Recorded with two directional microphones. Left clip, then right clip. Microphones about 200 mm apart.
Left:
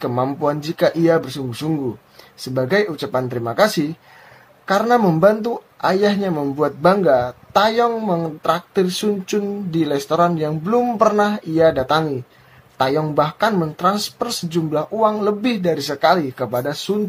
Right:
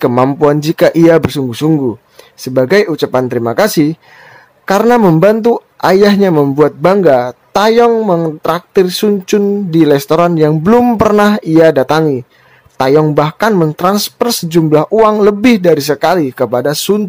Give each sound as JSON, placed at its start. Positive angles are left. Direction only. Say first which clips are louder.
{"t": 0.0, "sound": "a man's voice", "louder": "right 10 dB", "side_deg": -50}